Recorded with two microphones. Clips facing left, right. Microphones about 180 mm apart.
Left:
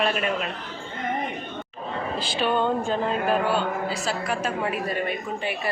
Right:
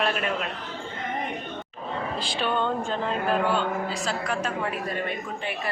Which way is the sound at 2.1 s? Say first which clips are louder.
Left 4 dB; centre (ahead or behind).